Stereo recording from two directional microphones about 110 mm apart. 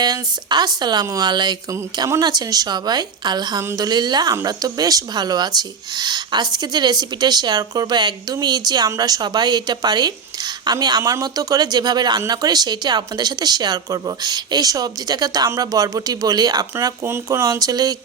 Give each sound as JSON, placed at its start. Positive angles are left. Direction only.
{"t": 0.0, "sound": "a woman's voice", "side_deg": -40}